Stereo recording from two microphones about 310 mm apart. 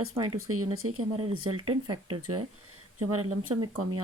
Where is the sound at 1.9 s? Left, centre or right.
Centre.